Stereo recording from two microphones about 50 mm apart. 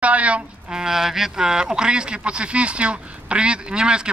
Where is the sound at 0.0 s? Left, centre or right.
Right.